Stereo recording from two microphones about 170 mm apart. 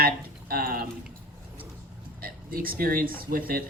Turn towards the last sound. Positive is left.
turn(degrees=-60)  # may be behind; listen again after turning